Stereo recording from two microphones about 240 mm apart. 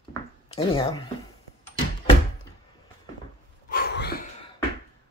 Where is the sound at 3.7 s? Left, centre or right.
Left.